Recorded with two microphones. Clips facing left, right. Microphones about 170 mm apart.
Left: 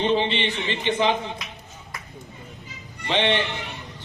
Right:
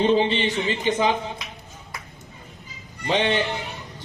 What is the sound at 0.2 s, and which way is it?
Speech, 40° right (ahead or behind).